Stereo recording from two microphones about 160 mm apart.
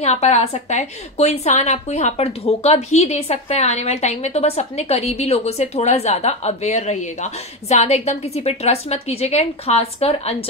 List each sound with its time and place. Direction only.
0.0 s a woman's voice: 45° left (ahead or behind)